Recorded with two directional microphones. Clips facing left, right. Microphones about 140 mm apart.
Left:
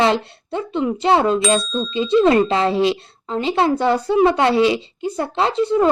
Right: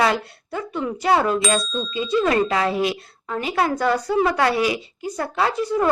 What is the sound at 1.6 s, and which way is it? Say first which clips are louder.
Bicycle bell: left 3 dB; centre (ahead or behind).